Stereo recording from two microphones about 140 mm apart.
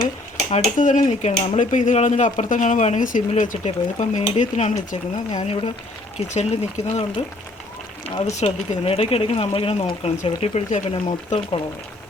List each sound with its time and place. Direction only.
0.5 s speech: 60° left (ahead or behind)
6.1 s speech: 50° left (ahead or behind)
8.1 s speech: 50° left (ahead or behind)